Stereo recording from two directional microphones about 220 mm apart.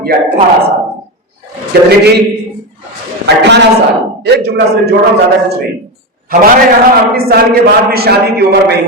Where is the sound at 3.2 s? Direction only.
50° right (ahead or behind).